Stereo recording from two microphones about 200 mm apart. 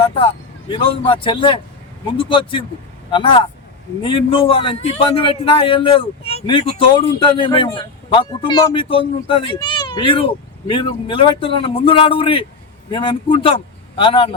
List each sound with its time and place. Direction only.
0.7 s speech: 25° left (ahead or behind)